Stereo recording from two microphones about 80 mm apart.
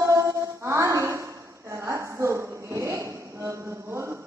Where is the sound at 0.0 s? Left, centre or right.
Right.